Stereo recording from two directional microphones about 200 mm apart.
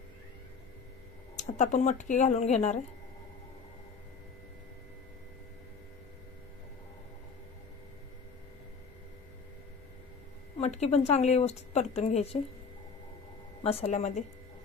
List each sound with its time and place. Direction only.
1.3 s a woman's voice: 35° left (ahead or behind)
10.6 s a woman's voice: 35° left (ahead or behind)
13.6 s a woman's voice: 30° left (ahead or behind)